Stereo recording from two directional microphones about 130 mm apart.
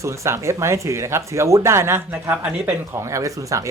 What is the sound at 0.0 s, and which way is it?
Speech, 25° right (ahead or behind).